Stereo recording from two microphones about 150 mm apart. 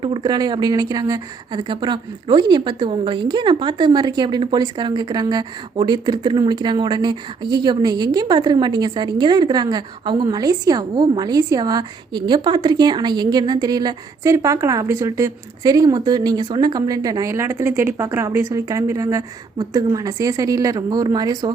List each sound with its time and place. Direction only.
0.0 s a woman's voice: 30° right (ahead or behind)